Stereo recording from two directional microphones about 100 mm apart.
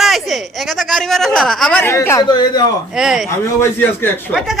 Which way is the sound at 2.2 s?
45° left (ahead or behind).